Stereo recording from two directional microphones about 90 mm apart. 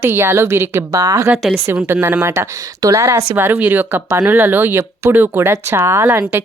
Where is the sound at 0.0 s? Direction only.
25° right (ahead or behind).